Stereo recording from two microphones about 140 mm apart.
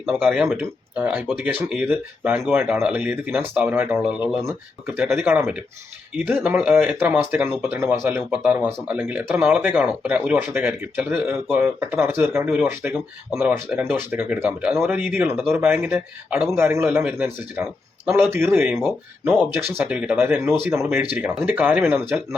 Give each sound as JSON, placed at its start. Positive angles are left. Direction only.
{"t": 0.2, "sound": "speech", "side_deg": -15}